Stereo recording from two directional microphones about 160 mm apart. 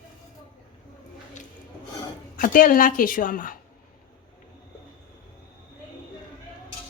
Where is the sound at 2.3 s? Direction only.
60° left (ahead or behind).